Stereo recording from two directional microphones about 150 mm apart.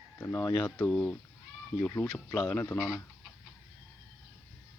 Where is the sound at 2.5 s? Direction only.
10° left (ahead or behind).